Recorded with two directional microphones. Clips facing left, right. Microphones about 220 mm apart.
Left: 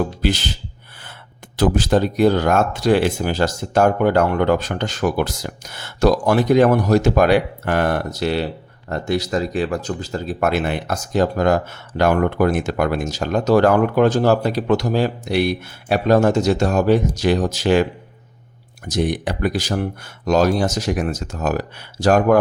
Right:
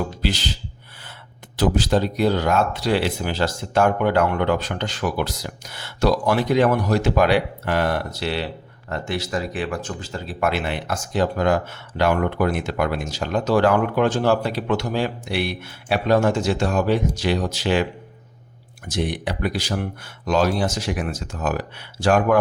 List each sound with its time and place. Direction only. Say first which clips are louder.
0.2 s speech: left 4 dB; 50° left (ahead or behind)
1.5 s speech: left 3 dB; 50° left (ahead or behind)
18.9 s speech: left 4 dB; 45° left (ahead or behind)